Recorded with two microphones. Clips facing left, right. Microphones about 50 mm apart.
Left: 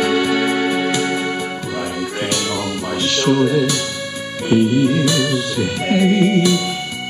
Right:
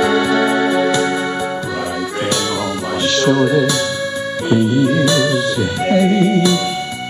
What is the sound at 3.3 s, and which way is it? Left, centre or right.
Music, right.